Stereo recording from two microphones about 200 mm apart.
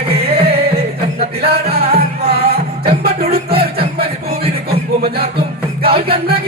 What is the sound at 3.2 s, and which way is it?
Music, 30° right (ahead or behind).